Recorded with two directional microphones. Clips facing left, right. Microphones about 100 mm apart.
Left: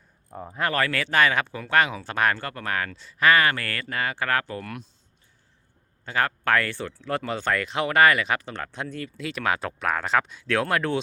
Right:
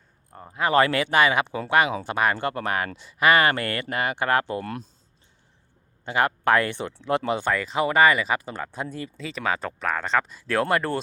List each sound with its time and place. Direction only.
0.3 s speech: 5° left (ahead or behind)
0.6 s speech: 20° right (ahead or behind)
2.4 s speech: 20° right (ahead or behind)
6.1 s speech: 15° right (ahead or behind)
7.5 s speech: 5° right (ahead or behind)